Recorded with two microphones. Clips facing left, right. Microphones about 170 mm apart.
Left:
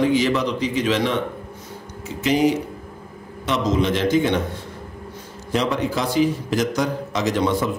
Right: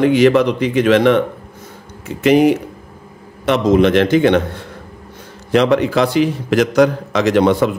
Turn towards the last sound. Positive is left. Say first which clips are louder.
# right 8 dB
turn(degrees=-70)  # may be behind; listen again after turning